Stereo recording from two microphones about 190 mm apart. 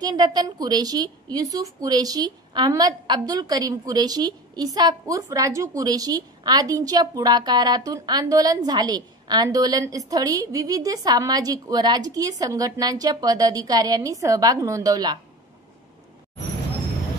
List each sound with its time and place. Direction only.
0.0 s a woman's voice: 20° right (ahead or behind)